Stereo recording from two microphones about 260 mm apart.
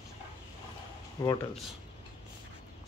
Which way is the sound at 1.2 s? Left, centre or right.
Centre.